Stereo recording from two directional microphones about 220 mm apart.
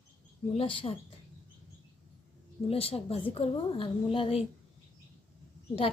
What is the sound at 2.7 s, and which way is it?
A woman's voice, 25° left (ahead or behind).